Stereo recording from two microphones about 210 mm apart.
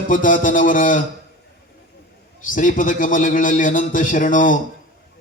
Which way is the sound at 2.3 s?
40° left (ahead or behind).